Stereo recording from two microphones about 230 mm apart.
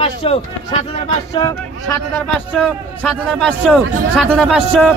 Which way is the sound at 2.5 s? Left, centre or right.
Centre.